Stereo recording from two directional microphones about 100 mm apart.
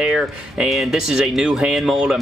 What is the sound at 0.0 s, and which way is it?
Speech, 5° right (ahead or behind).